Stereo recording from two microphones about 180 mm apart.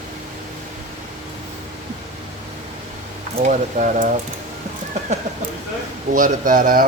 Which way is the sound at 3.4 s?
45° right (ahead or behind).